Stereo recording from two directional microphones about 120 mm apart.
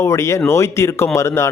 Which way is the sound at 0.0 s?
25° left (ahead or behind).